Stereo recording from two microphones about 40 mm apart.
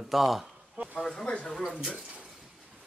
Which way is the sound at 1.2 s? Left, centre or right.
Left.